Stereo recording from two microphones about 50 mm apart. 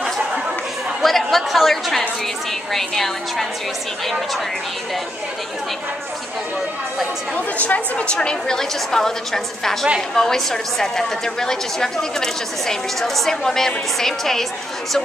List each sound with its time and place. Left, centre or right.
1.0 s chatter: centre
2.7 s a woman's voice: centre
7.5 s a woman's voice: left
8.1 s a woman's voice: centre